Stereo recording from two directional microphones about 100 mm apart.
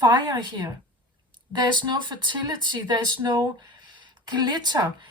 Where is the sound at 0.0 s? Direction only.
45° right (ahead or behind).